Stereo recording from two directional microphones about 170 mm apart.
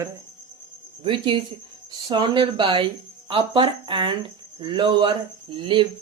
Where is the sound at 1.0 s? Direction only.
30° right (ahead or behind).